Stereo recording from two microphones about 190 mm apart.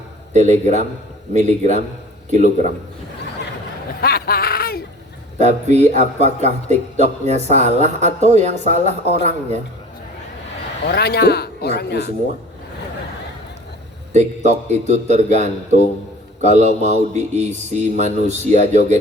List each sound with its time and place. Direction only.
0.3 s a man's voice: 40° right (ahead or behind)
4.0 s a sound: 55° left (ahead or behind)
5.4 s a man's voice: 35° right (ahead or behind)
10.8 s speech: 55° left (ahead or behind)
14.1 s a man's voice: 35° right (ahead or behind)